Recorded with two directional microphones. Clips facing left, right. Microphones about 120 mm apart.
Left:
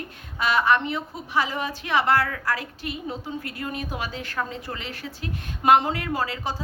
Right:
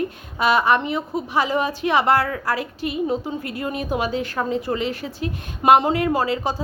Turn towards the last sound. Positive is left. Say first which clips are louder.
# right 6 dB
turn(degrees=-20)  # may be behind; listen again after turning